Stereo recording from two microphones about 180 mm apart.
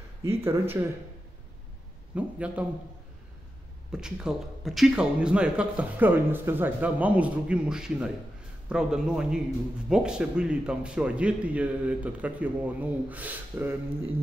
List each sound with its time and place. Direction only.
0.2 s a man's voice: 15° right (ahead or behind)
2.1 s a man's voice: 5° right (ahead or behind)
3.9 s a man's voice: 5° right (ahead or behind)